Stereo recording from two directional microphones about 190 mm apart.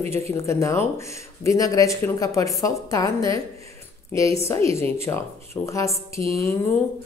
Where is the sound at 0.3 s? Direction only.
15° left (ahead or behind).